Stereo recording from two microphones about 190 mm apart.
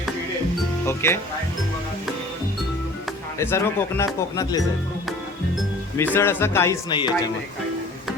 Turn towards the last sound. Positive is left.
turn(degrees=20)  # may be behind; listen again after turning